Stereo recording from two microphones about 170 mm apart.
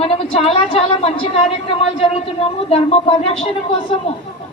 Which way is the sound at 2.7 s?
35° left (ahead or behind).